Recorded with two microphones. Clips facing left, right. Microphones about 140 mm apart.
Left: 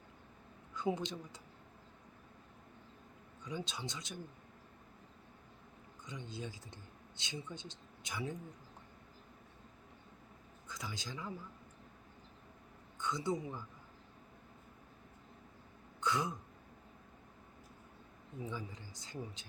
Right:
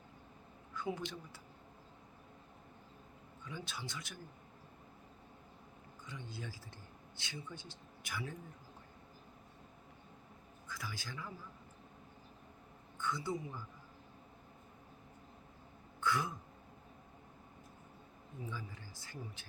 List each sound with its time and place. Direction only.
0.7 s speech: 20° left (ahead or behind)
3.4 s speech: 20° left (ahead or behind)
6.1 s speech: 20° left (ahead or behind)
10.7 s speech: 20° left (ahead or behind)
13.0 s speech: 20° left (ahead or behind)
16.0 s throat clearing: 20° left (ahead or behind)
18.4 s speech: 20° left (ahead or behind)